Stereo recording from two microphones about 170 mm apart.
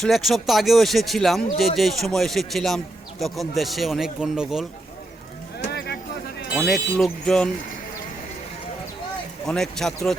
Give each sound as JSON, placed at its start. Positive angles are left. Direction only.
{"t": 0.0, "sound": "a man's voice", "side_deg": 0}
{"t": 5.6, "sound": "music", "side_deg": 75}
{"t": 6.6, "sound": "a man's voice", "side_deg": 5}
{"t": 9.5, "sound": "a man's voice", "side_deg": 5}